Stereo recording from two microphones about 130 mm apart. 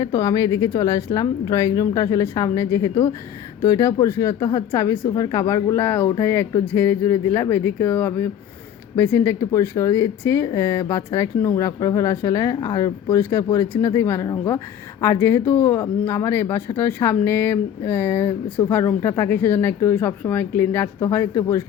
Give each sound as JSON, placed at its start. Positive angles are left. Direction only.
{"t": 0.0, "sound": "speech", "side_deg": 30}
{"t": 5.8, "sound": "speech", "side_deg": 15}